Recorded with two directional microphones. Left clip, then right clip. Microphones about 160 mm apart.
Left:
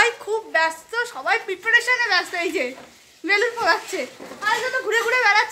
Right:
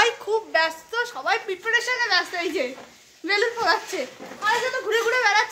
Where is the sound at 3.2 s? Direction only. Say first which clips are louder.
Left 2 dB; 20° left (ahead or behind).